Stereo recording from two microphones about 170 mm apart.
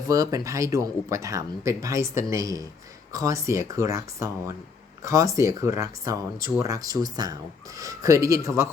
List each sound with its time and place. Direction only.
0.1 s speech: 20° right (ahead or behind)